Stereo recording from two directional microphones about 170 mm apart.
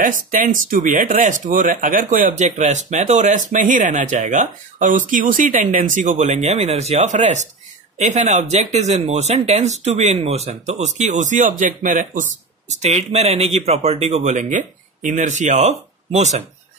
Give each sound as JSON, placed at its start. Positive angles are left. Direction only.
{"t": 0.0, "sound": "speech", "side_deg": -50}